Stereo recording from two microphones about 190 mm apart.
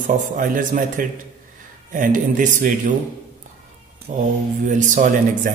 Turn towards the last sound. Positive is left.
turn(degrees=-45)  # may be behind; listen again after turning